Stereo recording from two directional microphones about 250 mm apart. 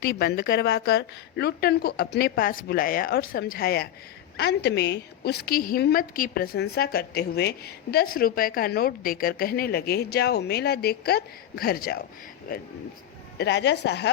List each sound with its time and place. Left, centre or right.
0.1 s a woman's voice: left
13.4 s a woman's voice: left